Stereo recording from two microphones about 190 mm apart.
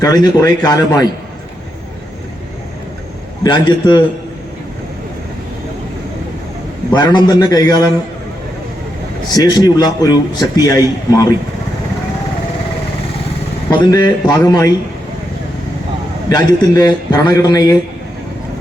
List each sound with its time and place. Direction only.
0.0 s a man's voice: 20° left (ahead or behind)
3.4 s a man's voice: 25° left (ahead or behind)
6.9 s a man's voice: 20° left (ahead or behind)
9.3 s a man's voice: 20° left (ahead or behind)
13.7 s a man's voice: 20° left (ahead or behind)
16.3 s a man's voice: 20° left (ahead or behind)